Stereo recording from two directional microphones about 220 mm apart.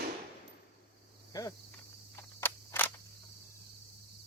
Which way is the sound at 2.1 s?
10° left (ahead or behind).